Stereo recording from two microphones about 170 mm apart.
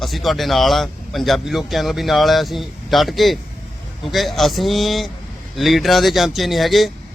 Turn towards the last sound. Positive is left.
turn(degrees=0)  # may be behind; listen again after turning